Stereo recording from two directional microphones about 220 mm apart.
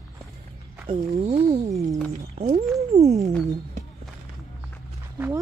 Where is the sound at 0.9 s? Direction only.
25° right (ahead or behind).